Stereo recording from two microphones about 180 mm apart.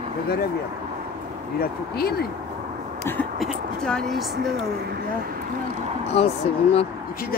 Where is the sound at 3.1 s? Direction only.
15° left (ahead or behind).